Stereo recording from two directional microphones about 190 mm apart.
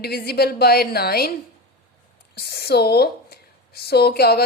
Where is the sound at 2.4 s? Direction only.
55° left (ahead or behind).